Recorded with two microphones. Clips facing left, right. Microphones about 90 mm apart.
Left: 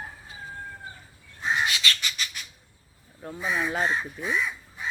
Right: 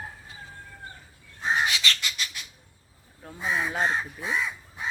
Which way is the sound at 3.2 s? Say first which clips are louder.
Left 1 dB; 5° left (ahead or behind).